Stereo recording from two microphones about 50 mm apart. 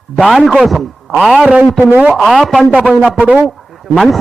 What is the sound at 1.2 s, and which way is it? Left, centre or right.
Speech, centre.